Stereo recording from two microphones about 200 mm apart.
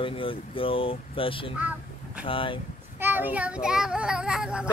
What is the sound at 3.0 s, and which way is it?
A child's voice, 10° right (ahead or behind).